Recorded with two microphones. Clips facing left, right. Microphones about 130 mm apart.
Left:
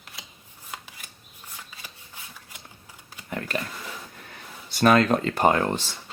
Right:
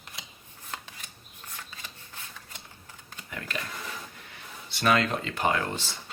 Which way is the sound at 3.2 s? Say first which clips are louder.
Left 7 dB; 40° left (ahead or behind).